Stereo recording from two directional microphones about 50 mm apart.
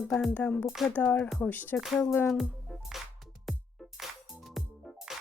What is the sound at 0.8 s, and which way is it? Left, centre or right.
Speech, centre.